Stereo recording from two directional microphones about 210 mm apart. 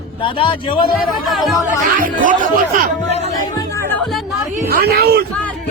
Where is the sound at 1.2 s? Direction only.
Centre (ahead or behind).